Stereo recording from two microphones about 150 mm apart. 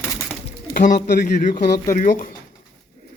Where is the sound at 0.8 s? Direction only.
60° left (ahead or behind).